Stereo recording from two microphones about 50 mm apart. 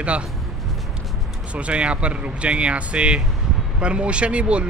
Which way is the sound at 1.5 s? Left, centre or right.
Right.